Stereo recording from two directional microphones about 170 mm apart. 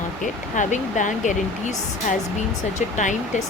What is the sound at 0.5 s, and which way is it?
Speech, 50° left (ahead or behind).